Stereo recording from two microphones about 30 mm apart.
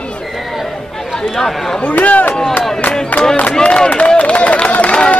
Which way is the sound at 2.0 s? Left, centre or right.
Left.